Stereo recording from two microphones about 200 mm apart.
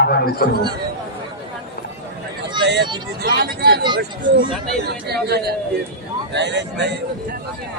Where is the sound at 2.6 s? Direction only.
60° right (ahead or behind).